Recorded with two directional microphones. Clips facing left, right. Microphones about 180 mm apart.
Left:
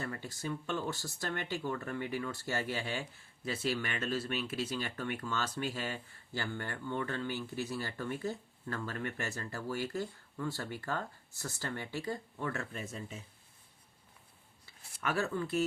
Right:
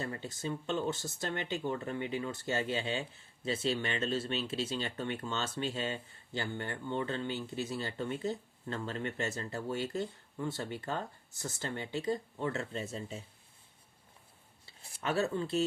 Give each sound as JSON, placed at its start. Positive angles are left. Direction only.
{"t": 0.0, "sound": "speech", "side_deg": -20}
{"t": 14.7, "sound": "speech", "side_deg": -25}